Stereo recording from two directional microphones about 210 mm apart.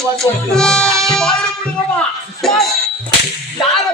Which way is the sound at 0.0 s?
Centre (ahead or behind).